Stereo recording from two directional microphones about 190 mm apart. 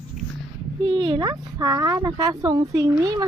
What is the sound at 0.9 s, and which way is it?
Speech, 25° right (ahead or behind).